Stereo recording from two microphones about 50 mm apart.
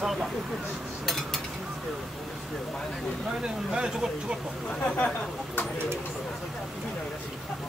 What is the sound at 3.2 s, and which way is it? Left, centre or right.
Speech, centre.